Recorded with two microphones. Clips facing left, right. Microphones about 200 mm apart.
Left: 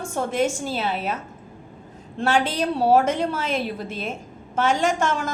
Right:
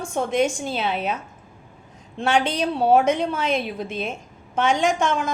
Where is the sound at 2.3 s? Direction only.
5° left (ahead or behind).